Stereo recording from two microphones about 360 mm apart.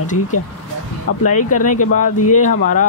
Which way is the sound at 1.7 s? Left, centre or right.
Left.